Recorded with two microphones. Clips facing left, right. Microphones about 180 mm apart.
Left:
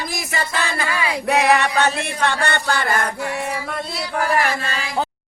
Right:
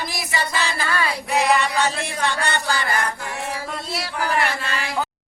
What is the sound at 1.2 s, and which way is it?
Speech, 65° left (ahead or behind).